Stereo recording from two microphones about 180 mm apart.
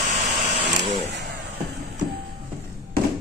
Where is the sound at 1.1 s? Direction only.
65° right (ahead or behind).